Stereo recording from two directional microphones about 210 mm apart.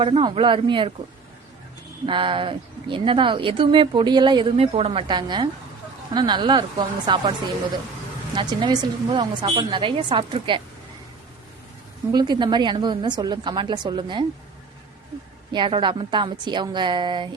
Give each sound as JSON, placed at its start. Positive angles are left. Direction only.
{"t": 0.0, "sound": "speech", "side_deg": -25}
{"t": 2.0, "sound": "speech", "side_deg": -25}
{"t": 8.4, "sound": "speech", "side_deg": -20}
{"t": 12.1, "sound": "speech", "side_deg": -20}
{"t": 15.5, "sound": "speech", "side_deg": -20}